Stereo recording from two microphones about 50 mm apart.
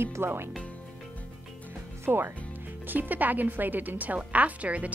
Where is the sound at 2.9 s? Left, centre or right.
Right.